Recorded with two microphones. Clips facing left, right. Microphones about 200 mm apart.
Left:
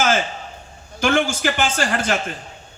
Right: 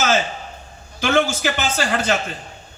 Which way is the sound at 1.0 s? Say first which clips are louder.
Even; 50° left (ahead or behind).